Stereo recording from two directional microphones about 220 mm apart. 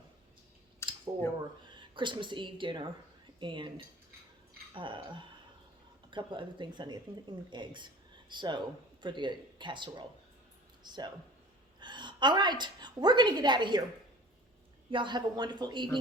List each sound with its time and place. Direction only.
0.8 s a sound: 10° left (ahead or behind)
1.7 s a woman's voice: 20° right (ahead or behind)
14.8 s speech: 20° right (ahead or behind)